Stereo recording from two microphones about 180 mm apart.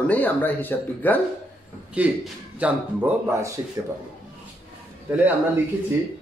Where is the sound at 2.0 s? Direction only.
5° right (ahead or behind).